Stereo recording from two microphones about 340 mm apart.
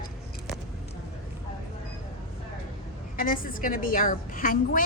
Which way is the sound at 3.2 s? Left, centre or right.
Left.